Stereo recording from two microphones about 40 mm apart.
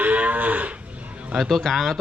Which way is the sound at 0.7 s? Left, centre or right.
Right.